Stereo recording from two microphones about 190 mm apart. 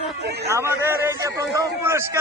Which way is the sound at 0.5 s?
15° right (ahead or behind).